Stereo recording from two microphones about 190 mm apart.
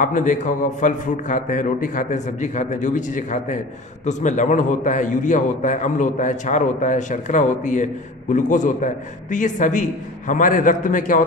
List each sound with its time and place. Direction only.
0.0 s a man's voice: 40° left (ahead or behind)